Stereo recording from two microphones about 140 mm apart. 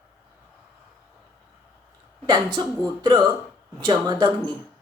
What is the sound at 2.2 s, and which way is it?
Speech, 35° right (ahead or behind).